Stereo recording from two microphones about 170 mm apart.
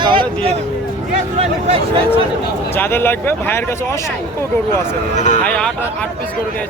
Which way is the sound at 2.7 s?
10° left (ahead or behind).